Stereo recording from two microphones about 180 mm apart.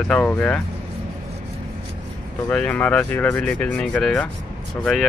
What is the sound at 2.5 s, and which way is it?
Rub, 5° left (ahead or behind).